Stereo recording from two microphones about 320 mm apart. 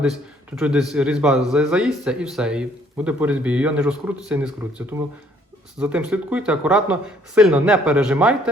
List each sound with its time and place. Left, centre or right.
0.5 s speech: centre